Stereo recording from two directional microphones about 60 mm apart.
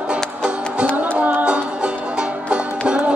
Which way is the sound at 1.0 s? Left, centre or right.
Right.